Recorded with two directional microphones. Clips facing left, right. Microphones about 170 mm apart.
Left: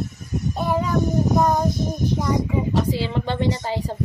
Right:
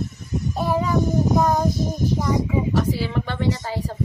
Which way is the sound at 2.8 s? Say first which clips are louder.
Even; 20° left (ahead or behind).